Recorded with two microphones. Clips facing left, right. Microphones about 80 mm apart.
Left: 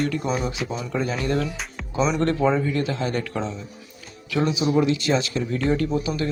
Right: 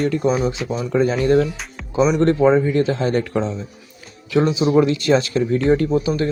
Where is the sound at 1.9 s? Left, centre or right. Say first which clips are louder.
Right 6 dB; centre.